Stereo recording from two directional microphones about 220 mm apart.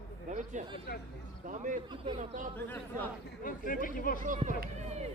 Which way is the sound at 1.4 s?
35° right (ahead or behind).